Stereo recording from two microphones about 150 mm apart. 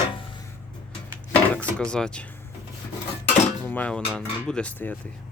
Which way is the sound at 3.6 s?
10° left (ahead or behind).